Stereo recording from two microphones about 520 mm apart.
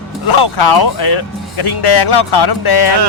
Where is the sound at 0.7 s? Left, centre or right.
Left.